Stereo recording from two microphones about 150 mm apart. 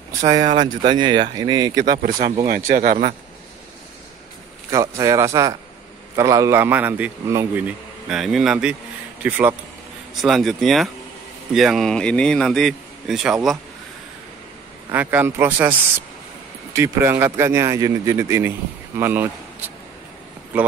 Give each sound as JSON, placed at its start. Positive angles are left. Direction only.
{"t": 0.2, "sound": "speech", "side_deg": -30}
{"t": 1.9, "sound": "speech", "side_deg": -65}
{"t": 2.5, "sound": "speech", "side_deg": -80}
{"t": 4.6, "sound": "a man's voice", "side_deg": -20}
{"t": 10.2, "sound": "a man's voice", "side_deg": 0}
{"t": 14.9, "sound": "a man's voice", "side_deg": -15}
{"t": 16.7, "sound": "a man's voice", "side_deg": -20}